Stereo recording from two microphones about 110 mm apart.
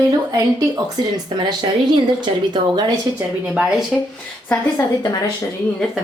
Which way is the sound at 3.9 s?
Centre (ahead or behind).